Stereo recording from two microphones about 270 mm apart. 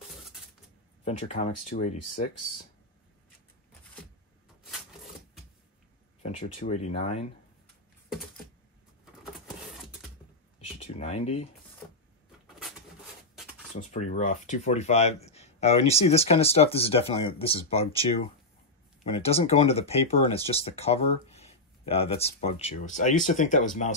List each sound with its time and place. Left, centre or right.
1.0 s speech: left
6.2 s speech: left
11.0 s speech: left
13.7 s speech: left
19.0 s speech: left